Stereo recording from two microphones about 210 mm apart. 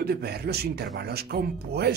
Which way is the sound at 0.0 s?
50° right (ahead or behind).